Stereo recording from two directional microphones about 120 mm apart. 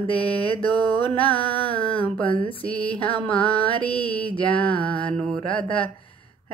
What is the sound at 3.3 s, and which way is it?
Music, 10° left (ahead or behind).